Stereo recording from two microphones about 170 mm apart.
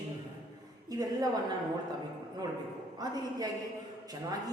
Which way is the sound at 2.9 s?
25° right (ahead or behind).